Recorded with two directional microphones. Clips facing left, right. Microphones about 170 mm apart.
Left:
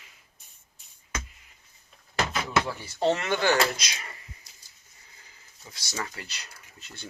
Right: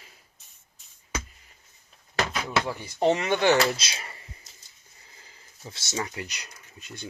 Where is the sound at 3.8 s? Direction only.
30° right (ahead or behind).